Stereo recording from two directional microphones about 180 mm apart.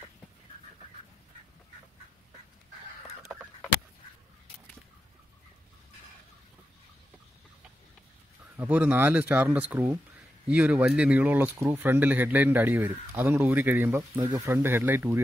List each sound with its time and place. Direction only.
8.5 s speech: 10° right (ahead or behind)